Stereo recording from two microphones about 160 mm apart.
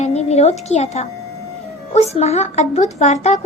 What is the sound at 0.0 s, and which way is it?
A woman's voice, 40° left (ahead or behind).